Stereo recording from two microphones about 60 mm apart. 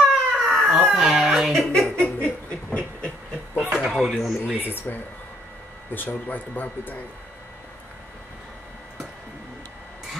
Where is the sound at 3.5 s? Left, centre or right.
Right.